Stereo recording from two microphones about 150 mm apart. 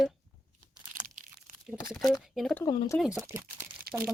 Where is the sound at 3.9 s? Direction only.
90° right.